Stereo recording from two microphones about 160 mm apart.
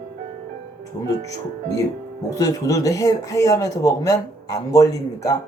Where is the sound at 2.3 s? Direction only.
20° left (ahead or behind).